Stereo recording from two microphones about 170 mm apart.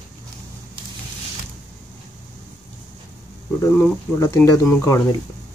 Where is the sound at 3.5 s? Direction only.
15° left (ahead or behind).